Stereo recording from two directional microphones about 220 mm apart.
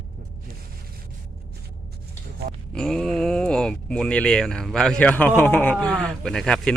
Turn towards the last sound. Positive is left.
turn(degrees=5)  # may be behind; listen again after turning